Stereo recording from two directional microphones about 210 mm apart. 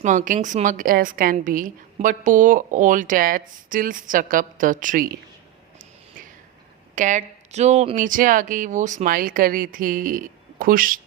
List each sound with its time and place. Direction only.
0.0 s a woman's voice: 35° right (ahead or behind)
6.9 s a woman's voice: 35° right (ahead or behind)